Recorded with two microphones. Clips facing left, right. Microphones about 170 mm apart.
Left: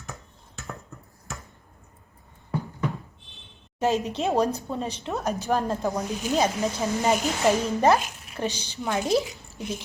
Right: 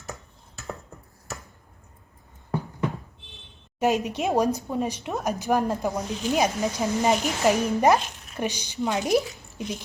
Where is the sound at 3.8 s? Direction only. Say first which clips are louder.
Right 1 dB; 15° right (ahead or behind).